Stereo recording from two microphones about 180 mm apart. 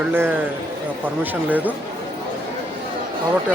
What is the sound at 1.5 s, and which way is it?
Speech, 10° right (ahead or behind).